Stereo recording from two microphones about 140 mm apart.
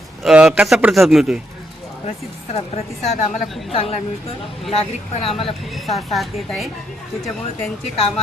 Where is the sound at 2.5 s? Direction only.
55° left (ahead or behind).